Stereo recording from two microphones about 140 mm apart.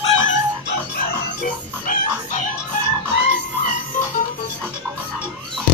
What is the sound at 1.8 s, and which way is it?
Chicken, 75° left (ahead or behind).